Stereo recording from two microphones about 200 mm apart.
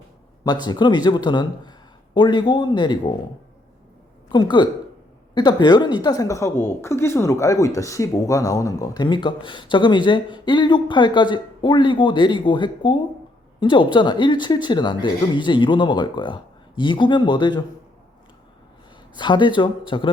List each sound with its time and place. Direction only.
0.4 s a woman's voice: 20° left (ahead or behind)
4.3 s a woman's voice: 20° left (ahead or behind)
19.1 s a woman's voice: 25° left (ahead or behind)